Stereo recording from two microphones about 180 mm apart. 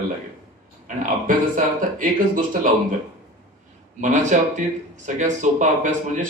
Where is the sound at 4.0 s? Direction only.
40° right (ahead or behind).